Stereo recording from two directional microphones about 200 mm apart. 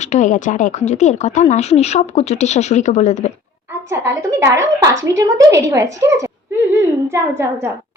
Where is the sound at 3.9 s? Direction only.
15° right (ahead or behind).